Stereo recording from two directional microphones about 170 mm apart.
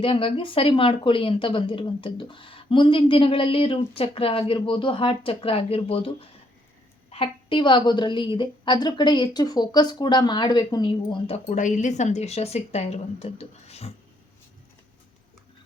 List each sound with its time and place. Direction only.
0.0 s a woman's voice: 30° left (ahead or behind)
11.4 s speech: 45° left (ahead or behind)